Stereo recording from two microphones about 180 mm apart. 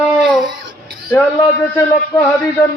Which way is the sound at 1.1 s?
15° left (ahead or behind).